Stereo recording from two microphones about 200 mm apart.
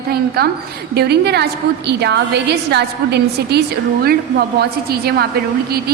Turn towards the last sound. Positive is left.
turn(degrees=-50)  # may be behind; listen again after turning